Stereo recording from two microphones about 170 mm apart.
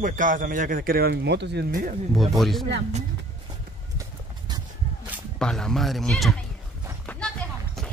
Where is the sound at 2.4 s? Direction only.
Centre (ahead or behind).